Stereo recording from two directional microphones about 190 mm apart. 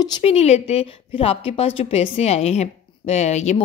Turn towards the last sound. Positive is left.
turn(degrees=35)  # may be behind; listen again after turning